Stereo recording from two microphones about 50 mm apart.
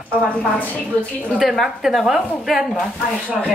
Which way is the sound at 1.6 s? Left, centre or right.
Centre.